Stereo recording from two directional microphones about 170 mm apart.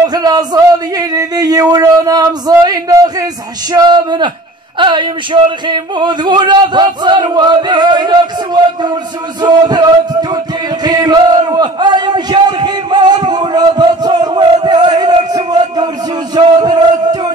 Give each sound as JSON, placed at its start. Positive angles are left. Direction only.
{"t": 0.0, "sound": "speech", "side_deg": -25}
{"t": 9.4, "sound": "music", "side_deg": -25}
{"t": 16.3, "sound": "a sound", "side_deg": -25}